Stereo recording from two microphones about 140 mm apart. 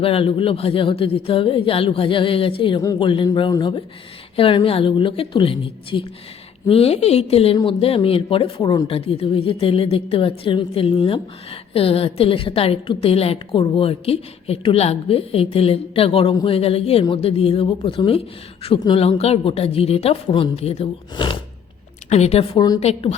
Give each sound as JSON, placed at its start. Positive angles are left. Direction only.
{"t": 0.0, "sound": "a woman's voice", "side_deg": 40}
{"t": 4.4, "sound": "a woman's voice", "side_deg": 40}
{"t": 22.1, "sound": "speech", "side_deg": 50}
{"t": 22.5, "sound": "speech", "side_deg": 30}
{"t": 22.8, "sound": "speech", "side_deg": 50}